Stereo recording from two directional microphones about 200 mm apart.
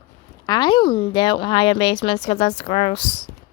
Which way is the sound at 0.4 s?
20° left (ahead or behind).